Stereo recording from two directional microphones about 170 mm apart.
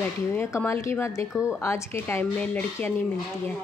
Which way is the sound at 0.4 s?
15° left (ahead or behind).